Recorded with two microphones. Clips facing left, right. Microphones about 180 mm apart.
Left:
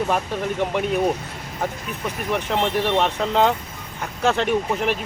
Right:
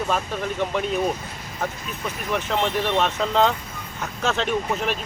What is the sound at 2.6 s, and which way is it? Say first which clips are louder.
Speech: left 2 dB; 15° left (ahead or behind).